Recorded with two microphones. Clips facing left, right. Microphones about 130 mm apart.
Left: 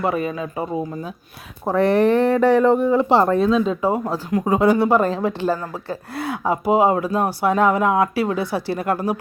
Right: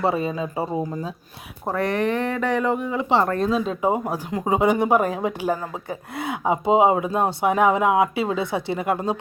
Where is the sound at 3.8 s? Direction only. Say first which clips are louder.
Left 1 dB; 15° right (ahead or behind).